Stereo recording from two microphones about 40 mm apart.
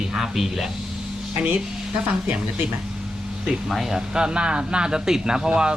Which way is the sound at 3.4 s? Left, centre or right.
Centre.